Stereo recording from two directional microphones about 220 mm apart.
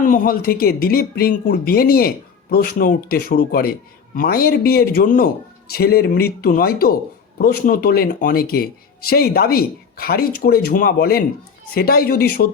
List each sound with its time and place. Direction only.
0.0 s speech: 40° left (ahead or behind)